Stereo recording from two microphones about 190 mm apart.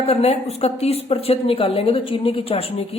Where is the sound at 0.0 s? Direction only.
30° left (ahead or behind).